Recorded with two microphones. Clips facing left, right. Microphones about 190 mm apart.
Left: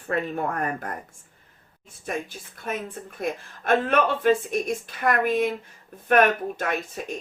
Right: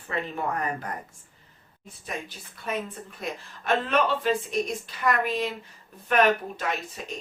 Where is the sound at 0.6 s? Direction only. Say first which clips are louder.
Left 2 dB; 50° left (ahead or behind).